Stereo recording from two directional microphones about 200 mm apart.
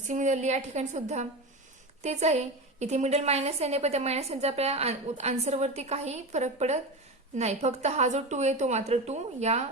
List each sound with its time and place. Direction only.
0.0 s a woman's voice: 40° right (ahead or behind)